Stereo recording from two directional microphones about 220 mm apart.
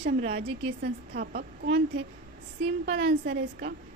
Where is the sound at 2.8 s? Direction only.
50° right (ahead or behind).